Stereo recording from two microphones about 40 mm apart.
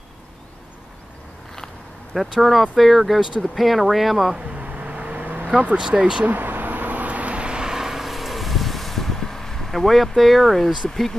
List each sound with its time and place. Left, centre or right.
2.3 s speech: centre
4.4 s a sound: right
4.6 s vehicle: right
5.8 s speech: centre
6.2 s a sound: right
7.7 s vehicle: centre